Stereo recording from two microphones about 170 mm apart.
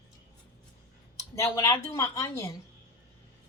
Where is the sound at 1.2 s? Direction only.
15° left (ahead or behind).